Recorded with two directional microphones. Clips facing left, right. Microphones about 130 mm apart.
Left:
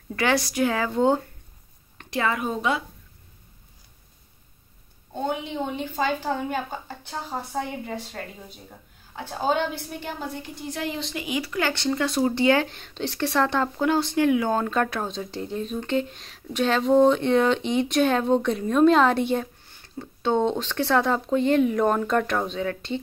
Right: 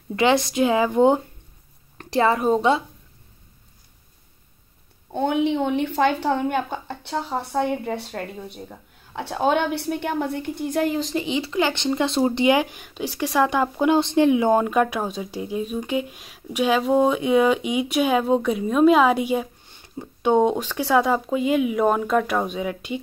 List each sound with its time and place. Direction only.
0.1 s speech: 20° right (ahead or behind)
2.0 s a woman's voice: 35° right (ahead or behind)
5.1 s speech: 70° right (ahead or behind); by 11.2 s 40° right (ahead or behind)
11.2 s speech: 25° right (ahead or behind)